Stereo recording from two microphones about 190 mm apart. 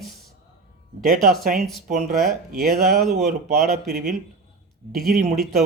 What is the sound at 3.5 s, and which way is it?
Speech, 50° right (ahead or behind).